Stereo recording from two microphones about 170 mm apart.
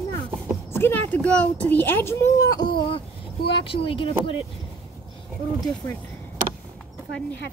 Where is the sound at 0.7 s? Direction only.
10° left (ahead or behind); by 4.1 s 30° left (ahead or behind).